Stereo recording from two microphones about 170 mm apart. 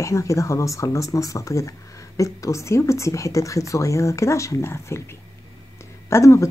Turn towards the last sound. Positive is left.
turn(degrees=15)  # may be behind; listen again after turning